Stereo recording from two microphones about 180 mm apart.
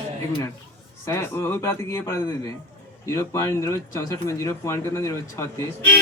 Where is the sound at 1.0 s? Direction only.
15° left (ahead or behind).